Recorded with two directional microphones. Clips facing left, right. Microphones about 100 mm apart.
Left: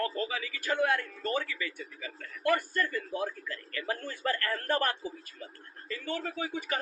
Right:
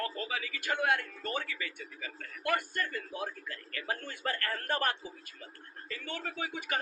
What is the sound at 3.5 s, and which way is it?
Speech, 30° right (ahead or behind).